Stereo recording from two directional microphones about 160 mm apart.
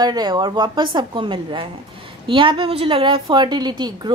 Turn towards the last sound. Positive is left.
turn(degrees=-25)  # may be behind; listen again after turning